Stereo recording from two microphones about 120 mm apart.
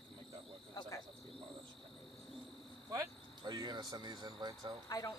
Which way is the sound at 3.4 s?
35° right (ahead or behind).